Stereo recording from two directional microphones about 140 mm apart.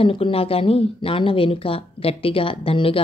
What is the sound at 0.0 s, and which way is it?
Speech, 40° left (ahead or behind).